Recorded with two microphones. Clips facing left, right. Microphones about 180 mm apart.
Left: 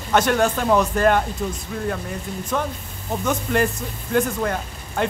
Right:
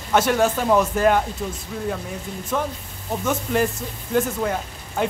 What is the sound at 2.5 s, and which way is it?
Speech, centre (ahead or behind).